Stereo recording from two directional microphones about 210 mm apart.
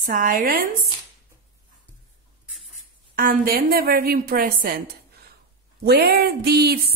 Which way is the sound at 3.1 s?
45° right (ahead or behind).